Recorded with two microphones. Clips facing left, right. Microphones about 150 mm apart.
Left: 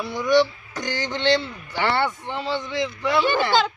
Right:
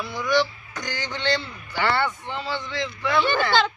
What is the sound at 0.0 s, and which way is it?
Speech, 15° left (ahead or behind).